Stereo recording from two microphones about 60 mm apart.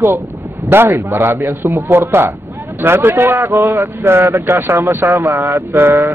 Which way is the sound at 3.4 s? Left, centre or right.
Right.